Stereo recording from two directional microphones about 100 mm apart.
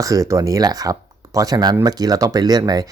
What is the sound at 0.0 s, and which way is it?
Speech, 35° right (ahead or behind).